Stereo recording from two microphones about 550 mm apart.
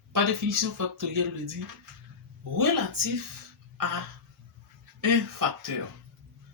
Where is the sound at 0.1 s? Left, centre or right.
Right.